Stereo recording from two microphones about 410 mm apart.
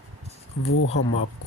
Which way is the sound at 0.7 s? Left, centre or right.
Left.